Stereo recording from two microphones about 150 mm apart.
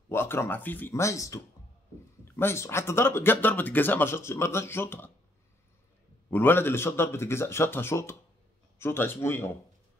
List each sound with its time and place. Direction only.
0.1 s speech: 15° left (ahead or behind)
6.3 s speech: 15° left (ahead or behind)